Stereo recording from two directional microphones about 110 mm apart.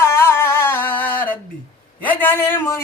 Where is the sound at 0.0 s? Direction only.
25° left (ahead or behind).